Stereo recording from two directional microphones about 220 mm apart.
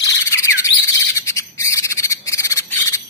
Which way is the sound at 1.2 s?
15° left (ahead or behind).